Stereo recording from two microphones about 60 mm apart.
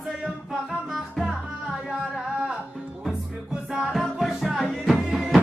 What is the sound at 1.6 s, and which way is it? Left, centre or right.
Music, centre.